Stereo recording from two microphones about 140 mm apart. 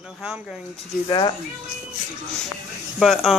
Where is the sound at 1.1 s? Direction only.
35° left (ahead or behind).